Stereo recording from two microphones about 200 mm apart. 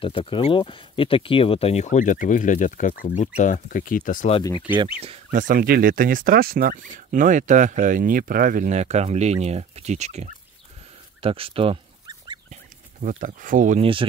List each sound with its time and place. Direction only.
0.0 s speech: 25° left (ahead or behind)
4.4 s speech: 20° left (ahead or behind)
5.3 s speech: 40° right (ahead or behind)
11.1 s a sound: 30° right (ahead or behind)
13.0 s speech: 40° right (ahead or behind)